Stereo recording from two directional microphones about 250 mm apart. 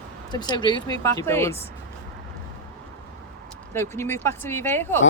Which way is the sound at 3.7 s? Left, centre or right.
Centre.